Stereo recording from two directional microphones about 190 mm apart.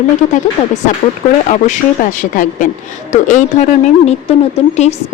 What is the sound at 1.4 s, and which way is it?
Speech, 40° left (ahead or behind).